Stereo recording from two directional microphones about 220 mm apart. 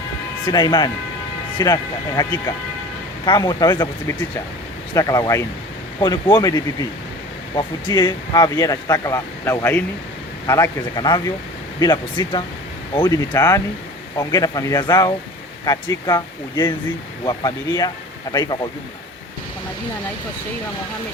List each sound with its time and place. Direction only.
0.4 s speech: 20° left (ahead or behind)
4.9 s speech: 15° left (ahead or behind)